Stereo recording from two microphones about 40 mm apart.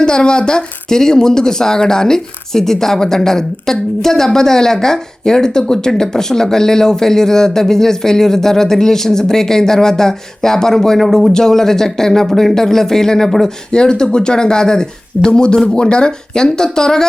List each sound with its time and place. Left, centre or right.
0.0 s a woman's voice: left